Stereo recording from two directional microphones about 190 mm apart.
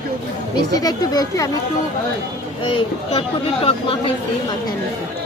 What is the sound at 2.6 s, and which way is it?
Speech, 25° left (ahead or behind).